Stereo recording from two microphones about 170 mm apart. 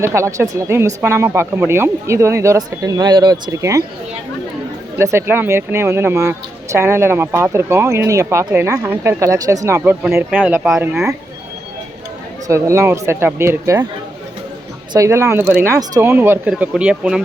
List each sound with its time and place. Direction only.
0.0 s speech: 15° right (ahead or behind)
4.9 s speech: 15° right (ahead or behind)
12.5 s speech: 15° right (ahead or behind)
14.9 s speech: 20° right (ahead or behind)